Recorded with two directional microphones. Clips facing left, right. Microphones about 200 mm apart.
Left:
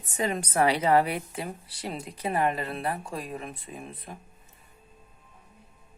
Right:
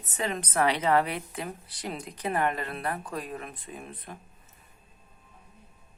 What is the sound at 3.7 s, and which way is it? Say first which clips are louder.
Speech: left 1 dB; 5° left (ahead or behind).